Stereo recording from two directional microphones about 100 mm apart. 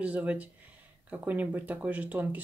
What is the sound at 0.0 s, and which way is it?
Speech, 15° right (ahead or behind).